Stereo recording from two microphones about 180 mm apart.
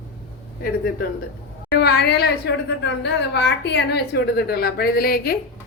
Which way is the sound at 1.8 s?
65° left (ahead or behind).